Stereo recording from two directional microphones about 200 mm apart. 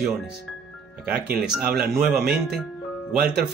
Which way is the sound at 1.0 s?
5° right (ahead or behind).